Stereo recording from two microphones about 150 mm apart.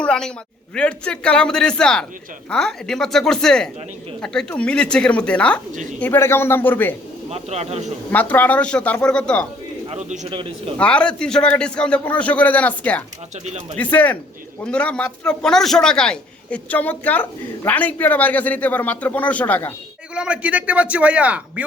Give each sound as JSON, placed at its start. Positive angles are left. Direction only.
{"t": 0.0, "sound": "a sound", "side_deg": 5}
{"t": 0.8, "sound": "a man's voice", "side_deg": 5}
{"t": 7.3, "sound": "speech", "side_deg": -45}
{"t": 8.1, "sound": "a man's voice", "side_deg": 10}
{"t": 9.9, "sound": "speech", "side_deg": -45}
{"t": 10.8, "sound": "a man's voice", "side_deg": 10}
{"t": 20.1, "sound": "a man's voice", "side_deg": -5}